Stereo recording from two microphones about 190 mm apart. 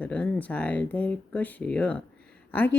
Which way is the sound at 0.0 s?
5° left (ahead or behind).